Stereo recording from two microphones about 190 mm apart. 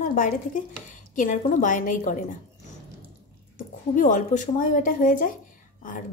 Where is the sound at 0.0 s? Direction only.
45° left (ahead or behind).